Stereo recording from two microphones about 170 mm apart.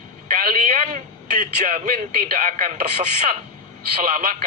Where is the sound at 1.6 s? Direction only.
45° right (ahead or behind).